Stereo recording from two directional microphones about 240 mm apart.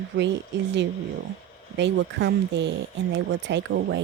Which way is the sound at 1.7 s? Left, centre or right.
Right.